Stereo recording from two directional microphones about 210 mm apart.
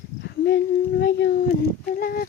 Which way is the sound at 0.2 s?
50° left (ahead or behind).